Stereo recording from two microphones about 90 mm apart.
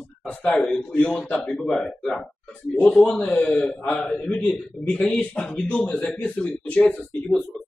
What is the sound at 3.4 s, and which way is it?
A man's voice, 10° left (ahead or behind).